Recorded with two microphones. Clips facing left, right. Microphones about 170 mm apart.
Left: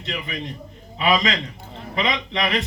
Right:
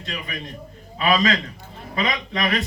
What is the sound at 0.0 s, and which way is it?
A man's voice, 20° left (ahead or behind).